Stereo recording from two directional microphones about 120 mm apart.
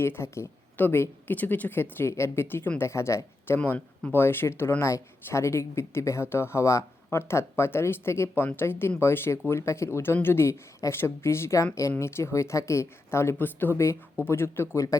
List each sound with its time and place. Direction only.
0.0 s speech: 20° left (ahead or behind)